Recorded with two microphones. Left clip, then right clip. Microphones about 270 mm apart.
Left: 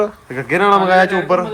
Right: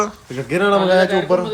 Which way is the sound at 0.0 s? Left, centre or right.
Centre.